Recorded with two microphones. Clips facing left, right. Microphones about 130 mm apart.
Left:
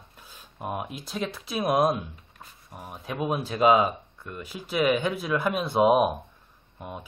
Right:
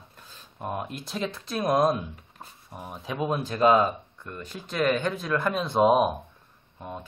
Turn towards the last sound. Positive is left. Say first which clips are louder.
# right 1 dB
turn(degrees=10)  # may be behind; listen again after turning